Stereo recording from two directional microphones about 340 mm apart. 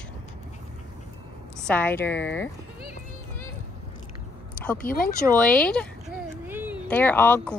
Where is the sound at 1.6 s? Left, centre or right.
Centre.